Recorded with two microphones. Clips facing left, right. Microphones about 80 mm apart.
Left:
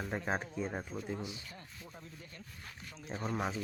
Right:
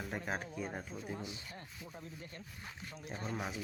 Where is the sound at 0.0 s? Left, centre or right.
Left.